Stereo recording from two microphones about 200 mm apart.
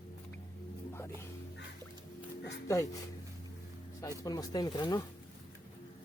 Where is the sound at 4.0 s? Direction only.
20° left (ahead or behind).